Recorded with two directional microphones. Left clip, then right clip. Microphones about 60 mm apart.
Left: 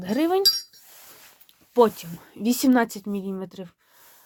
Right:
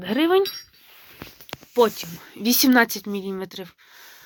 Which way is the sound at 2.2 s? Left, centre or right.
Left.